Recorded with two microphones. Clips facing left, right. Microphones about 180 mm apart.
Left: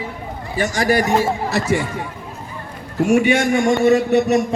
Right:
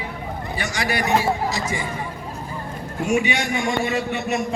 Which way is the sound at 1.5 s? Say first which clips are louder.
Left 7 dB; 65° left (ahead or behind).